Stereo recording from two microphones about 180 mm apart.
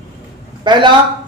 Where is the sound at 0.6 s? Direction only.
25° right (ahead or behind).